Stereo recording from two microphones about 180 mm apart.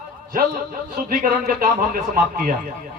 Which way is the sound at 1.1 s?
50° right (ahead or behind).